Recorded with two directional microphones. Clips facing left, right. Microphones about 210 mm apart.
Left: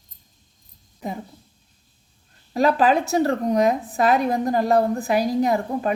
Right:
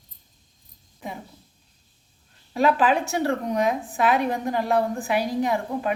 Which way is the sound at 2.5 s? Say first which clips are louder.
Left 2 dB; 40° left (ahead or behind).